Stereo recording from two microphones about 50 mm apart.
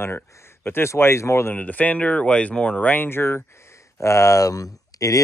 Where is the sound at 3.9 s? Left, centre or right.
Left.